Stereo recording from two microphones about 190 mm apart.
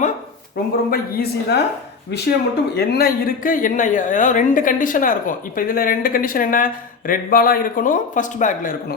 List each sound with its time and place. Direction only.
0.9 s a woman's voice: 55° left (ahead or behind)